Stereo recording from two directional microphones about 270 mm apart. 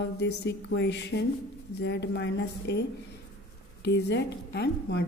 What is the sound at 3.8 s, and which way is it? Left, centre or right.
A woman's voice, left.